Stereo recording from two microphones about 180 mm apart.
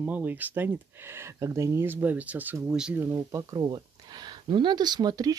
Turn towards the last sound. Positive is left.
turn(degrees=-20)  # may be behind; listen again after turning